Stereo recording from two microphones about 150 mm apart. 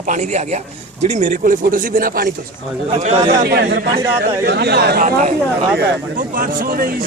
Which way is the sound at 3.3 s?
90° right.